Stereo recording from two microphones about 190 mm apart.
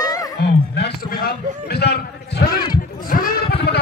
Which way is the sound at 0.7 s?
55° left (ahead or behind).